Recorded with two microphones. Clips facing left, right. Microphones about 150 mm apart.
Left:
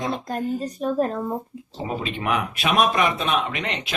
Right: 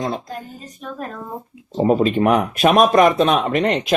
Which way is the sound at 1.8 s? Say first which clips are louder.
Right 11 dB; 45° right (ahead or behind).